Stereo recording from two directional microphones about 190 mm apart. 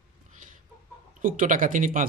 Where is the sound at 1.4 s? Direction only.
45° right (ahead or behind).